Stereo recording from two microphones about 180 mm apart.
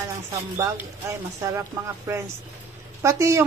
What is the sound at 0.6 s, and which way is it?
Speech, 15° right (ahead or behind).